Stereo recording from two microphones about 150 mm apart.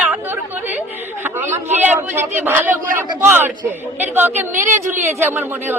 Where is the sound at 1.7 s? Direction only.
10° right (ahead or behind).